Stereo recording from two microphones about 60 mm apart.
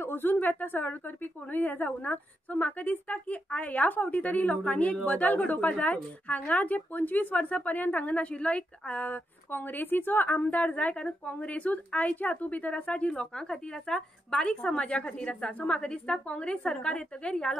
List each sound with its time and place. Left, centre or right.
0.0 s a woman's voice: left; by 17.5 s centre